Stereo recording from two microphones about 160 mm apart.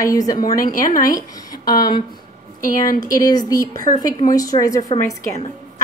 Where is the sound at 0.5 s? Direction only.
60° left (ahead or behind).